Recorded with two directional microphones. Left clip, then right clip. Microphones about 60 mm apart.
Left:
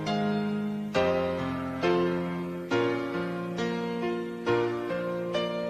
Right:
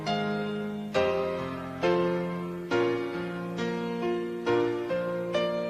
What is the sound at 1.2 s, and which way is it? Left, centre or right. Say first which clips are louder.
Music: left 1 dB; right.